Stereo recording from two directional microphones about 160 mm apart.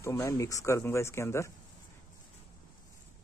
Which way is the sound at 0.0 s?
20° left (ahead or behind).